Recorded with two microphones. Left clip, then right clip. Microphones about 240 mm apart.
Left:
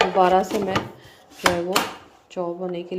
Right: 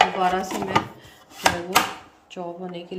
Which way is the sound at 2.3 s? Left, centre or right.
Centre.